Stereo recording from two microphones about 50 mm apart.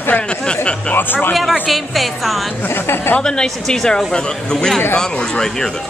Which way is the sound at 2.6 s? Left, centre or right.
Left.